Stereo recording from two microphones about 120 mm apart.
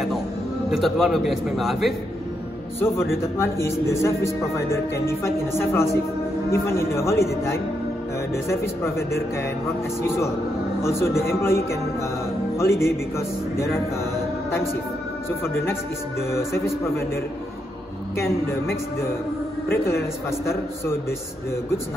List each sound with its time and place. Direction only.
0.7 s a man's voice: centre (ahead or behind)
3.3 s speech: 20° left (ahead or behind)
15.4 s speech: 20° left (ahead or behind)